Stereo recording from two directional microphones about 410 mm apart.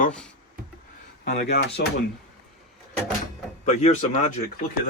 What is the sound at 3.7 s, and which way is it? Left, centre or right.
Speech, centre.